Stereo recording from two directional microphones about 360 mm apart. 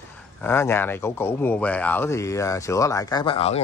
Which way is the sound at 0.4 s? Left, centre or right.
Centre.